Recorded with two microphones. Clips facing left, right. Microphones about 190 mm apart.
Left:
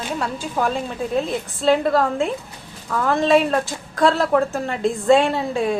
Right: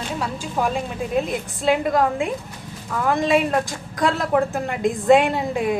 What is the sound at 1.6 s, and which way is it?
A woman's voice, 15° right (ahead or behind).